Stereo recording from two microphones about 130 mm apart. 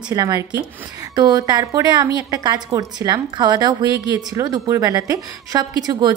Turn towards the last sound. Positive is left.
turn(degrees=-30)  # may be behind; listen again after turning